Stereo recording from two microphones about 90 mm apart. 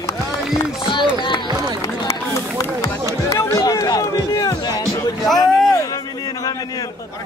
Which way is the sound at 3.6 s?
45° left (ahead or behind).